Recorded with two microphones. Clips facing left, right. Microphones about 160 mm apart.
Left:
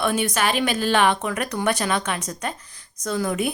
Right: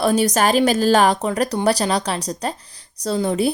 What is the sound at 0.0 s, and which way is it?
Speech, 40° right (ahead or behind).